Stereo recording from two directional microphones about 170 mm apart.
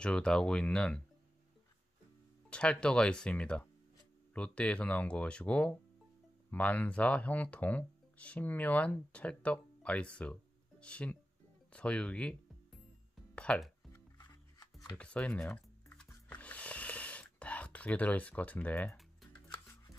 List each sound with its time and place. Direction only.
0.0 s speech: 5° left (ahead or behind)
2.5 s speech: 5° left (ahead or behind)
13.1 s music: 5° left (ahead or behind)
14.1 s music: 25° left (ahead or behind)
15.0 s music: 5° left (ahead or behind)